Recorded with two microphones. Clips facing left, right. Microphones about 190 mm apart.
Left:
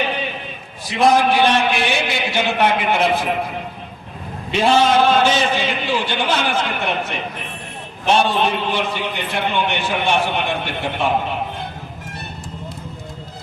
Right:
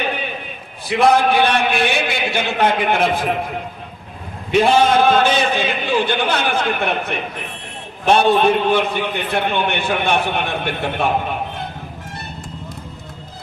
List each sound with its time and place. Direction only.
0.9 s a man's voice: 60° right (ahead or behind)
4.5 s a man's voice: 55° right (ahead or behind)